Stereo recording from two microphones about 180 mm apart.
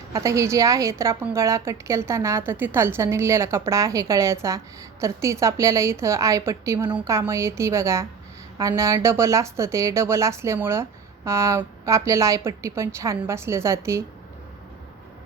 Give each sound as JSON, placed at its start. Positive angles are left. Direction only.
{"t": 0.1, "sound": "a woman's voice", "side_deg": -15}